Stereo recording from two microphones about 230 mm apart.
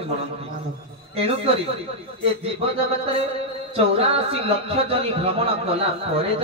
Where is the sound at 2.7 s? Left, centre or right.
Right.